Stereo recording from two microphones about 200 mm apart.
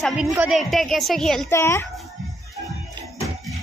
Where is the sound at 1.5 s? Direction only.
15° left (ahead or behind).